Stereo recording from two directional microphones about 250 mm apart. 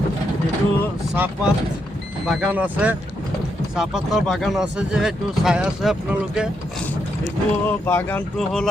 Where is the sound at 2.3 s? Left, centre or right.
Centre.